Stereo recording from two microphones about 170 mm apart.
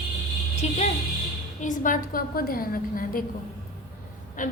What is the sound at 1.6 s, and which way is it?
A woman's voice, 50° left (ahead or behind).